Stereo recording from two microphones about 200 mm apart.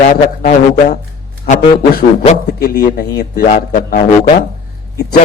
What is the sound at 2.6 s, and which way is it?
Speech, 50° left (ahead or behind).